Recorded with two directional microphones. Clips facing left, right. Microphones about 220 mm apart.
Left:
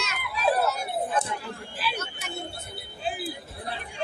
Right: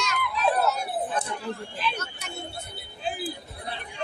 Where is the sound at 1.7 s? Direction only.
5° left (ahead or behind).